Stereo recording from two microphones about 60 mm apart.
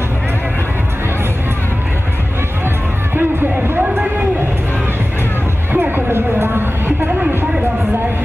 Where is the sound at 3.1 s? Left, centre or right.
Right.